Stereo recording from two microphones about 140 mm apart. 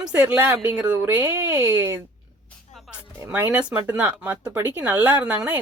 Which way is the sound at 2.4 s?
Centre (ahead or behind).